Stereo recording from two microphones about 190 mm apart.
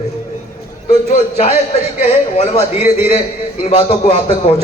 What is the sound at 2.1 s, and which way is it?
A man's voice, 35° left (ahead or behind).